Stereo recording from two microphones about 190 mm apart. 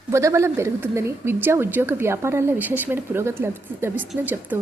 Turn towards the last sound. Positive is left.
turn(degrees=-10)  # may be behind; listen again after turning